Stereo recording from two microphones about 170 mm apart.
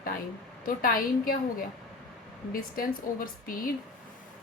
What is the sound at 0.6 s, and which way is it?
A woman's voice, 60° left (ahead or behind).